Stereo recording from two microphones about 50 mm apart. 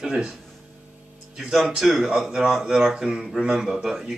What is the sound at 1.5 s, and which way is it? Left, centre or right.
Speech, centre.